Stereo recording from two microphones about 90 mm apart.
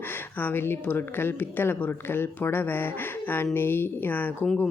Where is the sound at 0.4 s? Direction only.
25° left (ahead or behind).